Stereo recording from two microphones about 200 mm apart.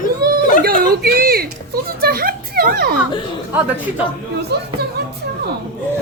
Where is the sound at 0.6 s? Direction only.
50° right (ahead or behind).